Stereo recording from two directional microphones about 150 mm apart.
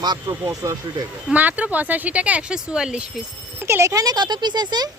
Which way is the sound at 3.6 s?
20° right (ahead or behind).